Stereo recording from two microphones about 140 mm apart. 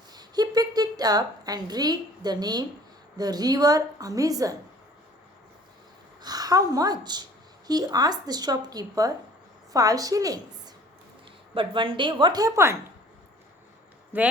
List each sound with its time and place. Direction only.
0.1 s a woman's voice: 30° right (ahead or behind)
6.2 s a sound: 25° right (ahead or behind)
6.7 s a woman's voice: 25° right (ahead or behind)
11.5 s a woman's voice: 35° right (ahead or behind); by 12.7 s 20° right (ahead or behind)
14.1 s speech: 15° right (ahead or behind)